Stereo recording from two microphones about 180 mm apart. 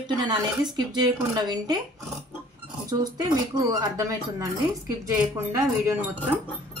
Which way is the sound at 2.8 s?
20° right (ahead or behind).